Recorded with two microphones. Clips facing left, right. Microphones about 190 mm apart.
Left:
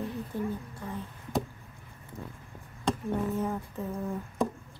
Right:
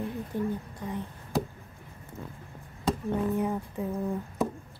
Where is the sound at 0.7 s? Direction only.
15° right (ahead or behind).